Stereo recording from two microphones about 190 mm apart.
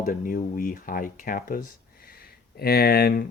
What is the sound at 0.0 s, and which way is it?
Speech, 45° left (ahead or behind).